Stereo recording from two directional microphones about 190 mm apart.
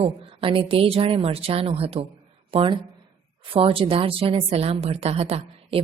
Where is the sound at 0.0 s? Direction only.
30° right (ahead or behind).